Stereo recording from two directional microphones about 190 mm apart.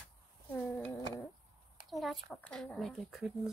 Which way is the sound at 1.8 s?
Centre (ahead or behind).